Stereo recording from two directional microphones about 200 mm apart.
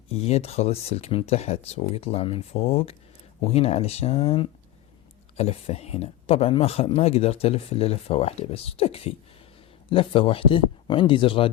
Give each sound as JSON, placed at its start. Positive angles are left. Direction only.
{"t": 0.1, "sound": "speech", "side_deg": 30}